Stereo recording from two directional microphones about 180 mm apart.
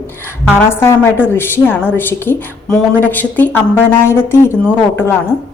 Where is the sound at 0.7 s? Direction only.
15° left (ahead or behind).